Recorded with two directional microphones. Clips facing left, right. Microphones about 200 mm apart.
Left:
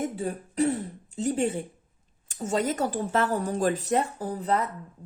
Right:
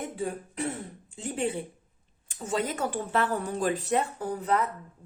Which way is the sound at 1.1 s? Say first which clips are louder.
Left 4 dB; 40° left (ahead or behind).